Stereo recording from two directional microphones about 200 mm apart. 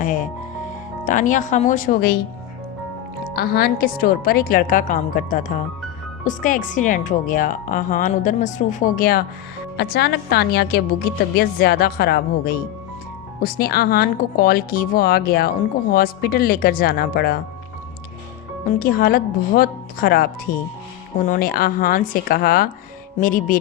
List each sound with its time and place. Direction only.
0.0 s speech: 40° left (ahead or behind)
3.3 s speech: 50° left (ahead or behind)
18.6 s speech: 50° left (ahead or behind)